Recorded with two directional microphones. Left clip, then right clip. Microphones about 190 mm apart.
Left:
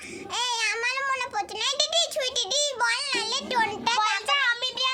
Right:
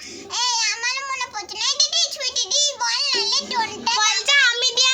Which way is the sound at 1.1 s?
50° left (ahead or behind).